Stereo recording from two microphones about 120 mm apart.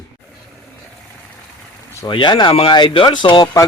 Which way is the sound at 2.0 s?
45° left (ahead or behind).